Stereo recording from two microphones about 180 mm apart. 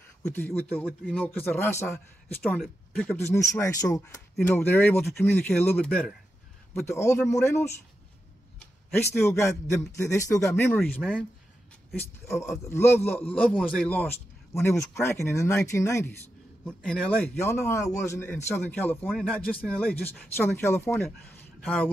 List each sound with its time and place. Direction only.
0.3 s speech: 10° left (ahead or behind)
2.6 s speech: 5° left (ahead or behind)
3.3 s speech: 15° left (ahead or behind)
8.9 s speech: 15° left (ahead or behind)
10.8 s a man's voice: centre (ahead or behind)
11.9 s speech: 15° left (ahead or behind)
16.6 s a man's voice: 5° left (ahead or behind)